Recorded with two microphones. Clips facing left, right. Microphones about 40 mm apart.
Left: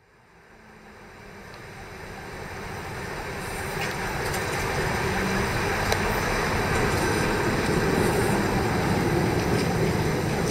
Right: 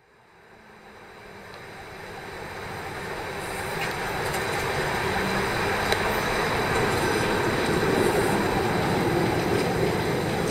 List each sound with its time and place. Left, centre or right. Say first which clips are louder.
2.3 s vehicle: even; right